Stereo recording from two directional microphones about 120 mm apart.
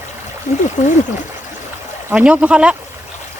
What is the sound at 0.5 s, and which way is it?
Speech, 90° left.